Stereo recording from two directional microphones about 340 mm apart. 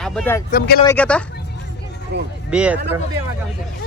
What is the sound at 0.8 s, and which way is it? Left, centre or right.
Speech, centre.